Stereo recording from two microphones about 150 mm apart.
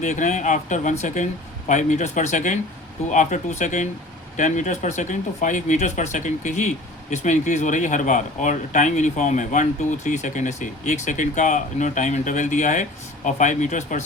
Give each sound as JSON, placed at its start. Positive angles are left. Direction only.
{"t": 0.0, "sound": "speech", "side_deg": 55}